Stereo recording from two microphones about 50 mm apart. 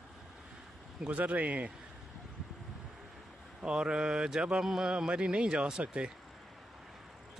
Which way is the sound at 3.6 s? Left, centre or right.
Centre.